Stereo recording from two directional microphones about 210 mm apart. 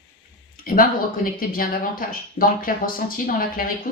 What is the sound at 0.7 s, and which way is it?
Speech, 45° left (ahead or behind).